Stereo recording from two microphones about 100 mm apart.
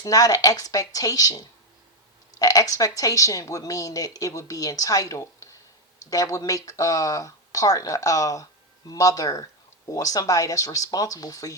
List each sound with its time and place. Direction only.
0.0 s speech: 35° left (ahead or behind)